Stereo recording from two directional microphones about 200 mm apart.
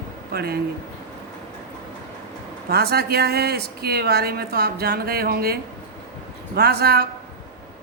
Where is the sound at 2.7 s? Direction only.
55° right (ahead or behind).